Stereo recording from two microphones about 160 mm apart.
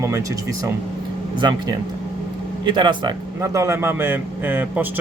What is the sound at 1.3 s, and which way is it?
Speech, 25° right (ahead or behind).